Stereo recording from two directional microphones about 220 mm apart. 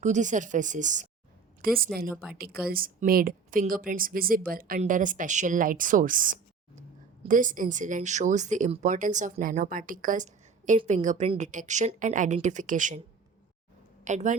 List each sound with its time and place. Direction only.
0.0 s speech: 35° right (ahead or behind)
14.0 s speech: 35° right (ahead or behind)